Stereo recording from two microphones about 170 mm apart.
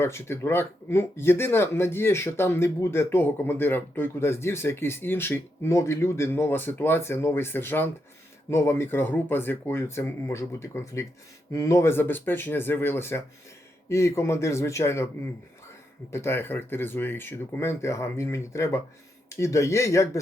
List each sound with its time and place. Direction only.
0.0 s speech: 15° left (ahead or behind)
16.1 s speech: 15° left (ahead or behind)